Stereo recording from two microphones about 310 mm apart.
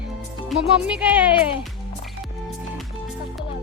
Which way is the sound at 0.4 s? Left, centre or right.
Centre.